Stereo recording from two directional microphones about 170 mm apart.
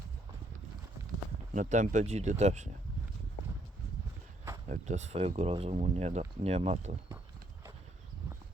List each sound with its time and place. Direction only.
1.5 s speech: 45° right (ahead or behind)
4.7 s speech: 45° right (ahead or behind)